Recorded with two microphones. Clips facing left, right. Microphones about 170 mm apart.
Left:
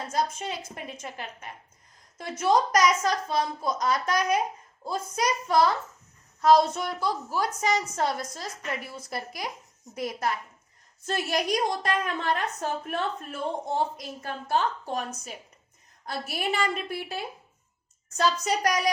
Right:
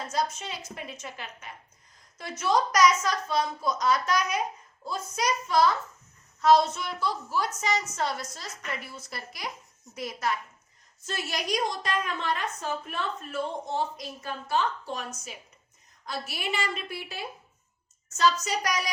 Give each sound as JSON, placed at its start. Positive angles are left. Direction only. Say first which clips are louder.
{"t": 0.1, "sound": "a woman's voice", "louder": "left 2 dB", "side_deg": 50}
{"t": 18.2, "sound": "a woman's voice", "louder": "left 1 dB", "side_deg": 50}